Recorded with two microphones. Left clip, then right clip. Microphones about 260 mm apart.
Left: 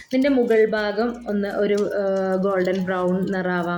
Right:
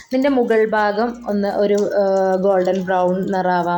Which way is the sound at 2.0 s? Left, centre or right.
Right.